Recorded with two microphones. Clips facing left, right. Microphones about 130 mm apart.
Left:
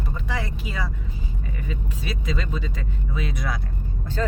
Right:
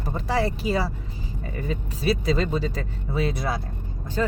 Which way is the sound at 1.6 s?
35° right (ahead or behind).